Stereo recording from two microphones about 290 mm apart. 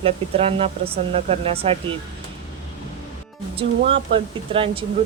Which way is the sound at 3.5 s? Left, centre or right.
Centre.